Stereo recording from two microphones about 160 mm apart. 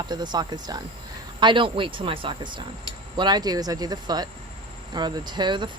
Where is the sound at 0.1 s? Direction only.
25° right (ahead or behind).